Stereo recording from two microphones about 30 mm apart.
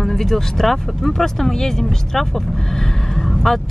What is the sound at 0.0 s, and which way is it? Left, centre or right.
Speech, centre.